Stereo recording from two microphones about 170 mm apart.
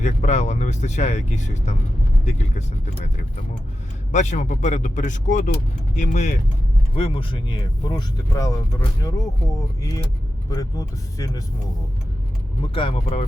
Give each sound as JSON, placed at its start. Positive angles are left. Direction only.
{"t": 0.0, "sound": "speech", "side_deg": 45}
{"t": 4.1, "sound": "speech", "side_deg": 45}
{"t": 6.9, "sound": "speech", "side_deg": 30}
{"t": 12.7, "sound": "speech", "side_deg": 35}